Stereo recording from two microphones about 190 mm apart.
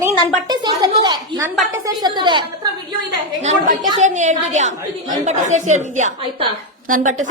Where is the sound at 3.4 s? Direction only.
45° right (ahead or behind).